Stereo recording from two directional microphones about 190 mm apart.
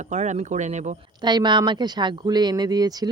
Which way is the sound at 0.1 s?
40° right (ahead or behind).